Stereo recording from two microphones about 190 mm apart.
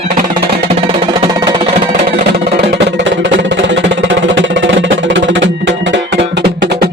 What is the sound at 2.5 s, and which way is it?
Music, 70° right (ahead or behind).